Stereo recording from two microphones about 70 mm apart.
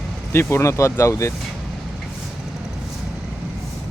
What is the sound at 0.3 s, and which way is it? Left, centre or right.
Speech, left.